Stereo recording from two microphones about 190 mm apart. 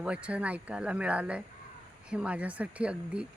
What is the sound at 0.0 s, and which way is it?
Speech, 5° right (ahead or behind).